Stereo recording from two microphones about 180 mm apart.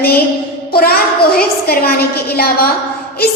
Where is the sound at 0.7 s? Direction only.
55° left (ahead or behind).